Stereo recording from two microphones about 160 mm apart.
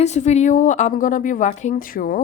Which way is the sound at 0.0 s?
45° left (ahead or behind).